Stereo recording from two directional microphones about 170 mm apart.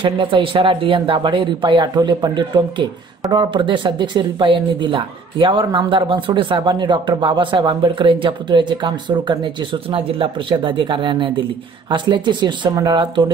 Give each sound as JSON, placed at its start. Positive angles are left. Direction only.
{"t": 0.0, "sound": "speech", "side_deg": -30}